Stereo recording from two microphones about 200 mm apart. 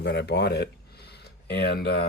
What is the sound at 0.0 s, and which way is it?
Speech, 60° left (ahead or behind).